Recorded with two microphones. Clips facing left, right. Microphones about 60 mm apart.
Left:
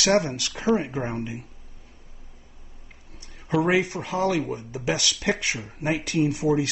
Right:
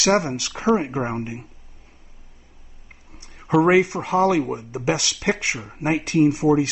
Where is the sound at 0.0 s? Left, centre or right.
Right.